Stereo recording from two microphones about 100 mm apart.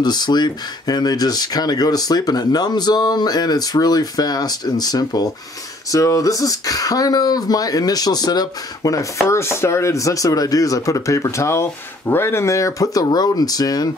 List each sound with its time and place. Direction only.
0.0 s speech: 45° left (ahead or behind)
9.3 s speech: 25° left (ahead or behind)